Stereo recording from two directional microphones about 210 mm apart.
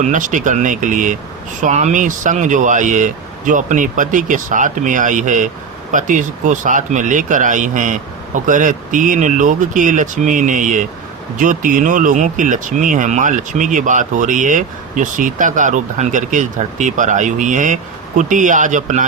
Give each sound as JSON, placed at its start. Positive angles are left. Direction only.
{"t": 0.0, "sound": "speech", "side_deg": -35}